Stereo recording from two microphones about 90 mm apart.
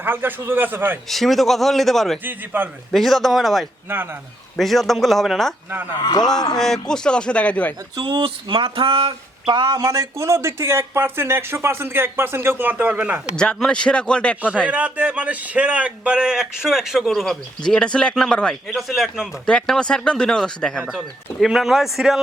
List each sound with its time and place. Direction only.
0.0 s speech: 25° right (ahead or behind)
1.1 s a man's voice: centre (ahead or behind)
2.2 s speech: 25° right (ahead or behind)
2.9 s a man's voice: centre (ahead or behind)
3.8 s speech: 25° right (ahead or behind)
4.5 s a man's voice: 5° left (ahead or behind)
6.0 s speech: 50° left (ahead or behind)
6.2 s speech: 5° left (ahead or behind)
7.9 s speech: 60° right (ahead or behind); by 9.6 s 90° right
9.6 s speech: 45° right (ahead or behind); by 13.2 s 15° right (ahead or behind)
13.3 s speech: 10° left (ahead or behind)
14.7 s a man's voice: 15° right (ahead or behind); by 18.5 s 10° left (ahead or behind)
18.7 s a man's voice: centre (ahead or behind)
21.4 s a man's voice: 5° right (ahead or behind)